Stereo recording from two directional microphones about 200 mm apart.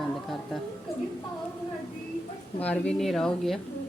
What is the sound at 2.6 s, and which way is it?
Speech, 5° left (ahead or behind).